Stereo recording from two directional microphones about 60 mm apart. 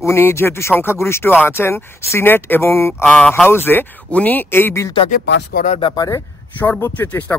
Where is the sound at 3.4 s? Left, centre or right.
Left.